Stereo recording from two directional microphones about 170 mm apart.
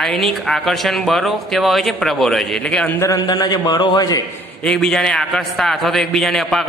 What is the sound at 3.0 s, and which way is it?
A man's voice, 20° left (ahead or behind).